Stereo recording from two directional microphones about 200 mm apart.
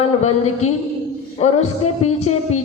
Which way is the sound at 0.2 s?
35° left (ahead or behind).